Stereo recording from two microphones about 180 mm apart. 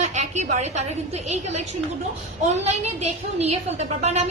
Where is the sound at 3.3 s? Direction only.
35° right (ahead or behind).